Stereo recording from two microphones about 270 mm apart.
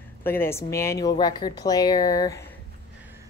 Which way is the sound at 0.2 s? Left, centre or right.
Centre.